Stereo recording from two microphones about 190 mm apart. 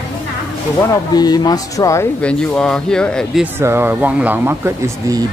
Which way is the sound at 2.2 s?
5° left (ahead or behind).